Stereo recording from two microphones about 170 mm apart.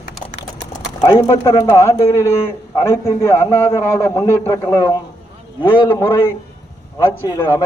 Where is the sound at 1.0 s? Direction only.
15° left (ahead or behind).